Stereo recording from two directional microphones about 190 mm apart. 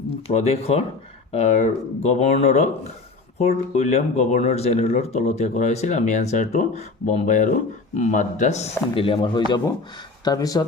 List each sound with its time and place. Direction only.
0.3 s speech: 35° left (ahead or behind)